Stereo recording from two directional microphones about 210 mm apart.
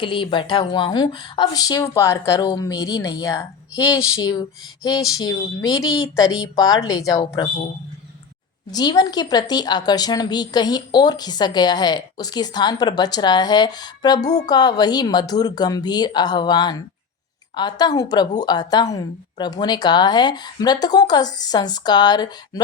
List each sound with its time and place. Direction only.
0.0 s speech: 25° left (ahead or behind)
8.7 s speech: 20° left (ahead or behind)